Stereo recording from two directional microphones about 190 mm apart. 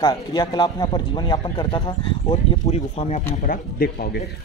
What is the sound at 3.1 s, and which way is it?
Speech, 45° left (ahead or behind).